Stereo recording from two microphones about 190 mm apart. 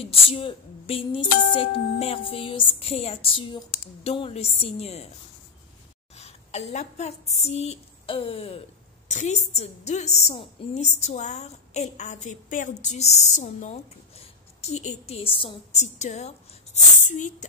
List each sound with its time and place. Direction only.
0.0 s a woman's voice: 30° left (ahead or behind)
6.1 s a woman's voice: 35° left (ahead or behind)